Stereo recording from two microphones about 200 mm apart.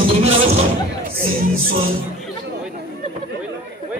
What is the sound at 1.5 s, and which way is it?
Music, 45° right (ahead or behind).